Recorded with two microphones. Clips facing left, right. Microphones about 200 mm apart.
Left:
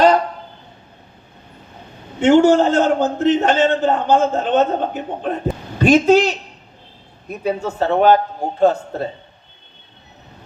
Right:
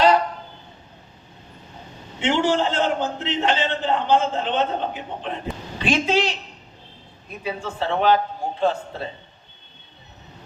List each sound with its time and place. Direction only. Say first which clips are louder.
2.2 s a man's voice: left 9 dB; 45° left (ahead or behind)
7.4 s a man's voice: left 7 dB; 45° left (ahead or behind)